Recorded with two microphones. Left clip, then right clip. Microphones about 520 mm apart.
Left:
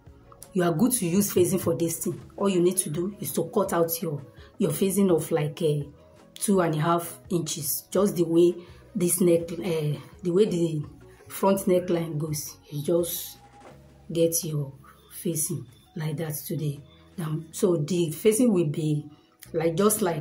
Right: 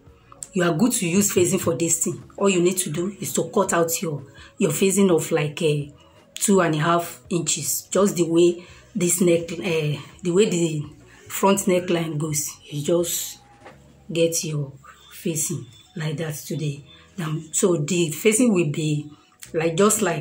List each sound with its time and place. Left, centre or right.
0.6 s speech: left
14.1 s speech: left